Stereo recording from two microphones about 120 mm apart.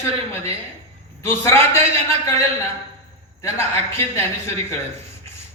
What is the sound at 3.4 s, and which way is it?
Speech, 20° left (ahead or behind).